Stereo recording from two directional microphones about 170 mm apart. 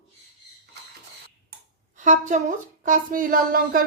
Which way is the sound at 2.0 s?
45° right (ahead or behind).